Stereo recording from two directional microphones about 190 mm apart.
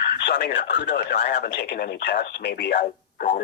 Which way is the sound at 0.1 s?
55° left (ahead or behind).